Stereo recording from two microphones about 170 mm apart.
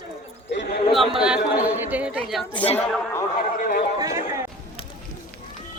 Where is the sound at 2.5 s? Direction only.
30° left (ahead or behind).